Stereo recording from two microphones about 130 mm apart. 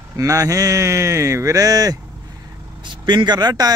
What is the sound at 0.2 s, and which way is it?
Speech, 25° right (ahead or behind).